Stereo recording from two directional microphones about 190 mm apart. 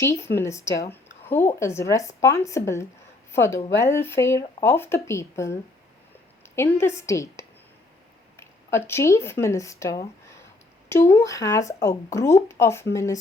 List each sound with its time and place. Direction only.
0.0 s speech: 15° left (ahead or behind)